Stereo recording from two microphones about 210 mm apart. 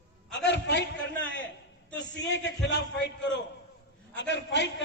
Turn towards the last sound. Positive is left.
turn(degrees=55)  # may be behind; listen again after turning